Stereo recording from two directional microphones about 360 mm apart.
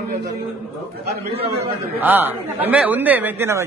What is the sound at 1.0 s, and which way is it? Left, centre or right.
Speech, right.